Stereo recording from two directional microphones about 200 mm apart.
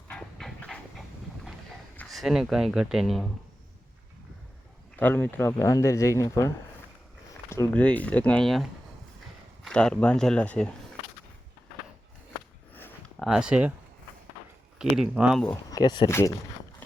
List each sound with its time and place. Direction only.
0.1 s train: 5° left (ahead or behind)
2.0 s speech: centre (ahead or behind)
4.9 s speech: 10° left (ahead or behind)
7.5 s speech: 10° left (ahead or behind)
9.6 s speech: 5° left (ahead or behind)
12.7 s a sound: 10° left (ahead or behind)
13.2 s speech: 5° right (ahead or behind)
14.8 s speech: centre (ahead or behind)
15.7 s speech: 20° left (ahead or behind)